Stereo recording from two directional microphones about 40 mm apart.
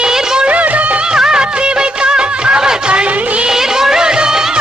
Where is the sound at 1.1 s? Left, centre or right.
Centre.